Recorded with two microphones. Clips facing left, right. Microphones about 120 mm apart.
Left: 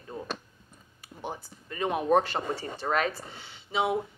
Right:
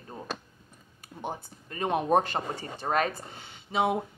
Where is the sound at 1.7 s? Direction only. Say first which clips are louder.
Even; 30° right (ahead or behind).